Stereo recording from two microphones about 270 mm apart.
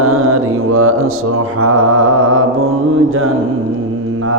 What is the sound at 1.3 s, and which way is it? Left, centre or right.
Music, right.